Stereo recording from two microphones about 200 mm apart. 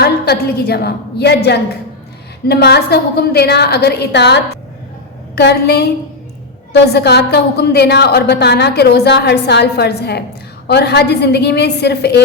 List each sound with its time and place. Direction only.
0.0 s a woman's voice: 50° left (ahead or behind)